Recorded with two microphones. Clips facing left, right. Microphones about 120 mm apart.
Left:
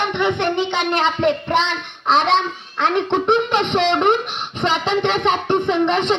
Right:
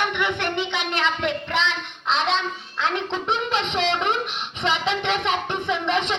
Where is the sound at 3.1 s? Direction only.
50° left (ahead or behind).